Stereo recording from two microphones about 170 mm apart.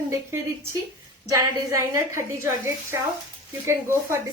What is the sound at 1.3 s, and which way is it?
A woman's voice, 15° right (ahead or behind).